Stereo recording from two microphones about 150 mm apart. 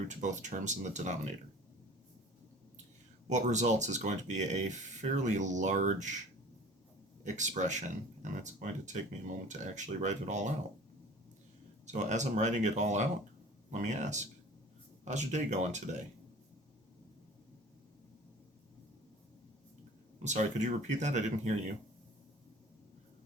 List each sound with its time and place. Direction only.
0.1 s speech: 55° right (ahead or behind)
3.2 s speech: 50° right (ahead or behind)
7.3 s speech: 55° right (ahead or behind)
11.9 s speech: 50° right (ahead or behind)
20.2 s speech: 55° right (ahead or behind)